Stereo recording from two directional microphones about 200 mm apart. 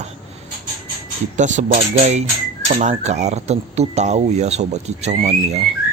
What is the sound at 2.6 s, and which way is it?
Dishes, 40° right (ahead or behind).